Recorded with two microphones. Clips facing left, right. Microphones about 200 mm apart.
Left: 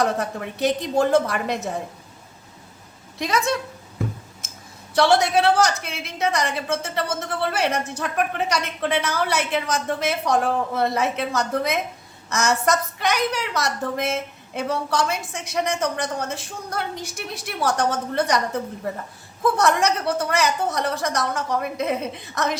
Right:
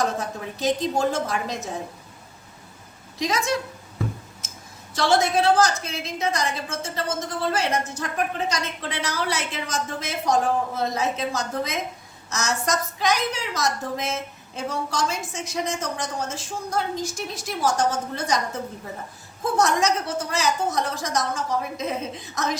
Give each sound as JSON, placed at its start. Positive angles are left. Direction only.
{"t": 0.0, "sound": "a woman's voice", "side_deg": 65}
{"t": 3.2, "sound": "a woman's voice", "side_deg": 60}
{"t": 4.9, "sound": "a woman's voice", "side_deg": 65}
{"t": 19.5, "sound": "a woman's voice", "side_deg": 60}